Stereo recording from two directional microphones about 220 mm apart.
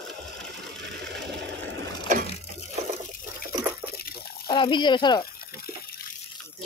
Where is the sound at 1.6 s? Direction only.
50° right (ahead or behind).